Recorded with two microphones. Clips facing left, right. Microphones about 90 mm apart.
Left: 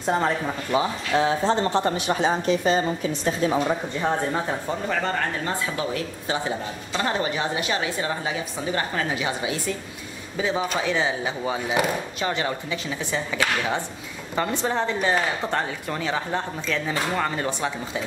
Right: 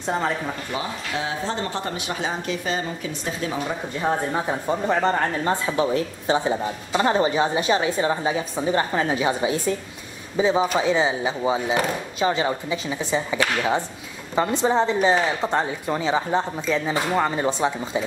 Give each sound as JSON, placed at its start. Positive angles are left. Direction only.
{"t": 0.0, "sound": "speech", "side_deg": 0}
{"t": 0.7, "sound": "speech", "side_deg": 40}
{"t": 4.0, "sound": "a woman's voice", "side_deg": -10}